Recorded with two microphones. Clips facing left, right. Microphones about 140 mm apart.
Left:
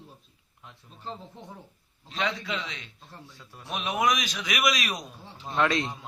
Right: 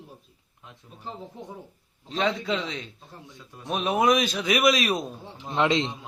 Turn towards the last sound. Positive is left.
turn(degrees=-20)  # may be behind; listen again after turning